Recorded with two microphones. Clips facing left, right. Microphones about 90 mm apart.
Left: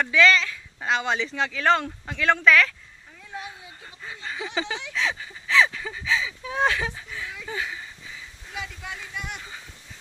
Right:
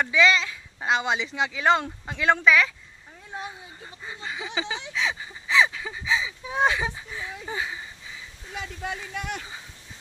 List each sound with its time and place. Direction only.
0.0 s speech: 15° right (ahead or behind)
3.8 s a sound: 15° right (ahead or behind)
7.4 s speech: 20° right (ahead or behind)
8.5 s speech: 45° right (ahead or behind)